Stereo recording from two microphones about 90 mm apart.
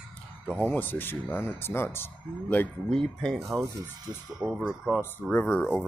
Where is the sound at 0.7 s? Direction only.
20° left (ahead or behind).